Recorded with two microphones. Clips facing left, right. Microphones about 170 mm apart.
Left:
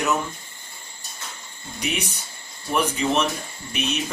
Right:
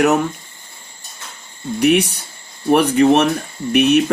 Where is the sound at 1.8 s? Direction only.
65° right (ahead or behind).